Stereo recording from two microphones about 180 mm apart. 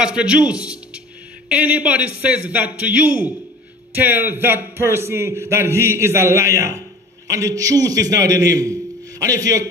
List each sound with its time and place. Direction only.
0.0 s a man's voice: 5° right (ahead or behind)